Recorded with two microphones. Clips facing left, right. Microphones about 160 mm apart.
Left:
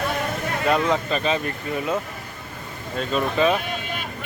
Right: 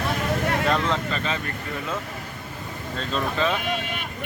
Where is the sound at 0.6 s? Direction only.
10° left (ahead or behind).